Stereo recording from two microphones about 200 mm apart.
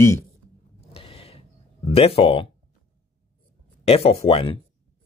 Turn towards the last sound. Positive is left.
turn(degrees=30)  # may be behind; listen again after turning